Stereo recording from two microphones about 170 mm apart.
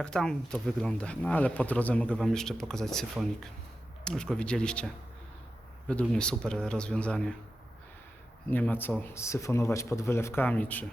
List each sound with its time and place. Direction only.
0.0 s speech: 5° left (ahead or behind)
5.9 s speech: 5° left (ahead or behind)
8.4 s speech: 10° left (ahead or behind)